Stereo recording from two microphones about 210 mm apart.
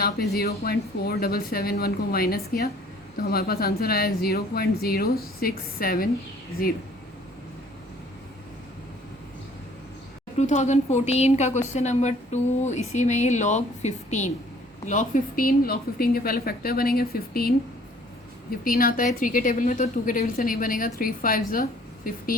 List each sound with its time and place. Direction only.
0.3 s speech: 45° left (ahead or behind)
10.3 s speech: 35° left (ahead or behind)
18.6 s speech: 45° left (ahead or behind)